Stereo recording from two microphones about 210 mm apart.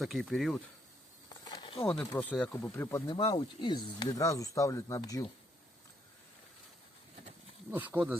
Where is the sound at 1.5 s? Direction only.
20° left (ahead or behind).